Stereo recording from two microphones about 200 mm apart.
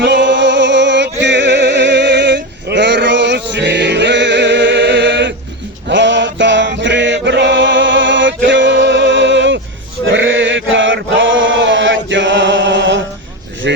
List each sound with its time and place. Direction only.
0.0 s music: 60° right (ahead or behind)
8.4 s male singing: 65° right (ahead or behind)
10.1 s chant: 70° right (ahead or behind)
13.6 s a sound: 60° right (ahead or behind)